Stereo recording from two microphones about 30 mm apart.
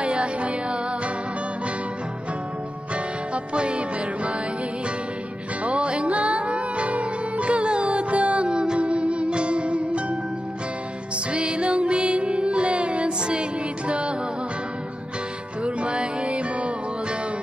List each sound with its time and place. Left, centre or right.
0.0 s music: right
3.5 s music: right
5.6 s music: right
8.5 s music: right
8.7 s music: right
11.3 s music: right
15.6 s music: right